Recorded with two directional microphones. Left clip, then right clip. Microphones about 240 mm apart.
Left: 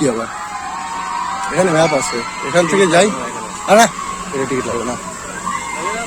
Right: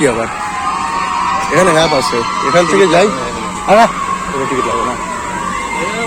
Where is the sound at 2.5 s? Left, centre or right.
Left.